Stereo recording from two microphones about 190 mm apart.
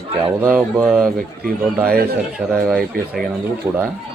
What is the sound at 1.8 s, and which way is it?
Speech, 50° right (ahead or behind).